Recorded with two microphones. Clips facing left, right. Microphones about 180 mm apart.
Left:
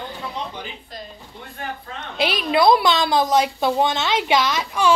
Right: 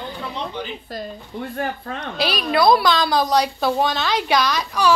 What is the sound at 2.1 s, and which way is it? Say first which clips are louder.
A woman's voice: left 1 dB; 20° left (ahead or behind).